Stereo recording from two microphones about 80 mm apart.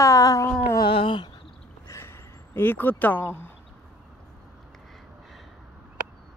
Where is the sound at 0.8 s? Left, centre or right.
Left.